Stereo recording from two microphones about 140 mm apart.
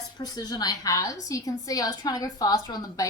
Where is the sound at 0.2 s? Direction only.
30° left (ahead or behind).